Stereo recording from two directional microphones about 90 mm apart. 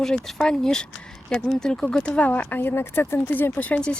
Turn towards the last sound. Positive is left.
turn(degrees=15)  # may be behind; listen again after turning